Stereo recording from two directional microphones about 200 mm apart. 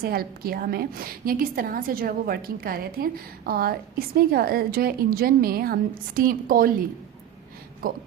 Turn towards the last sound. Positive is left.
turn(degrees=-50)  # may be behind; listen again after turning